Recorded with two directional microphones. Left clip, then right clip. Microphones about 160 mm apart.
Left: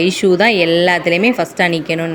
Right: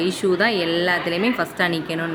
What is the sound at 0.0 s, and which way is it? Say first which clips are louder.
A woman's voice: left 7 dB; 35° left (ahead or behind).